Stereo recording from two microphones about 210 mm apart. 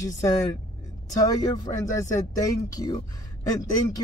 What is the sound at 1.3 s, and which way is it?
A man's voice, 15° left (ahead or behind).